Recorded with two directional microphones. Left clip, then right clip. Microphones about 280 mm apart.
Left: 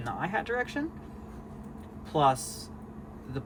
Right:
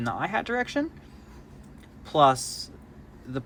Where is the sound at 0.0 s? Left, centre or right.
Right.